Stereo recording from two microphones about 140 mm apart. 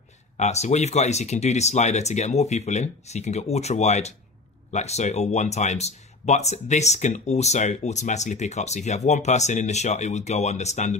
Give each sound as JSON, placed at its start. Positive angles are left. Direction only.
{"t": 0.4, "sound": "speech", "side_deg": 55}